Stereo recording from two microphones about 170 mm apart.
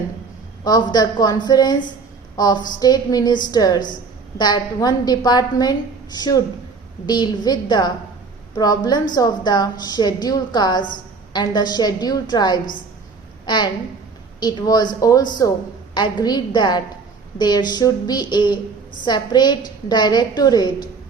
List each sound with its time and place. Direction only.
0.6 s a woman's voice: 25° left (ahead or behind)